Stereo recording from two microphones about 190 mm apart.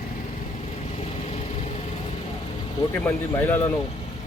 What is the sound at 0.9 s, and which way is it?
Vehicle, 35° left (ahead or behind).